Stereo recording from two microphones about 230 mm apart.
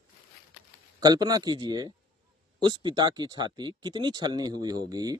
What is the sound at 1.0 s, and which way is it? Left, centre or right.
Speech, centre.